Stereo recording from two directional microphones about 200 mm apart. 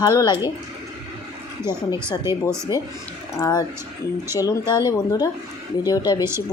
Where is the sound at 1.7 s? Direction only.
15° right (ahead or behind).